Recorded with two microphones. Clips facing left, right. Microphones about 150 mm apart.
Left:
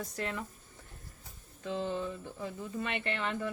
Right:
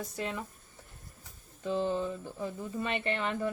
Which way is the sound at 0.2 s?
15° right (ahead or behind).